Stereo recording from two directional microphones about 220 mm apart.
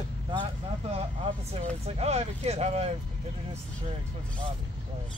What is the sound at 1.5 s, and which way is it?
Speech, 30° right (ahead or behind).